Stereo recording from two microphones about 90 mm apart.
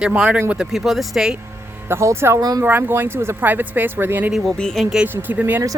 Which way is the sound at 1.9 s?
30° right (ahead or behind).